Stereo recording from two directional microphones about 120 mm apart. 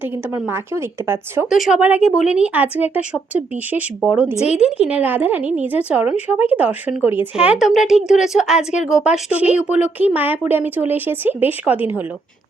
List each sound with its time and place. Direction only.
0.0 s a woman's voice: 20° right (ahead or behind)
1.5 s a woman's voice: 5° right (ahead or behind)
7.3 s a woman's voice: 5° right (ahead or behind)